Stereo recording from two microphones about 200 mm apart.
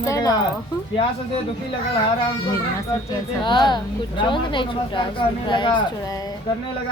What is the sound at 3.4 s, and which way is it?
A woman's voice, 25° left (ahead or behind).